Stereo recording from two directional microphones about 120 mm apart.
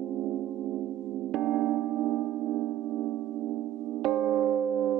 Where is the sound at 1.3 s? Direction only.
Centre (ahead or behind).